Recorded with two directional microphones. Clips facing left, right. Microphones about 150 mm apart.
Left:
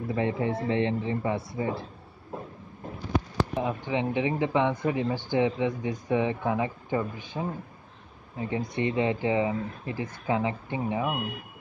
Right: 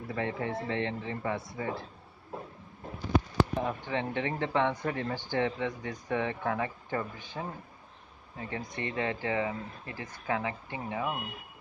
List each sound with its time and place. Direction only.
0.1 s speech: 20° left (ahead or behind)
3.5 s speech: 15° left (ahead or behind)